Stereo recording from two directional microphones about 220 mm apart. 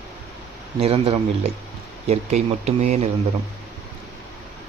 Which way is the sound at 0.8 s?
25° right (ahead or behind).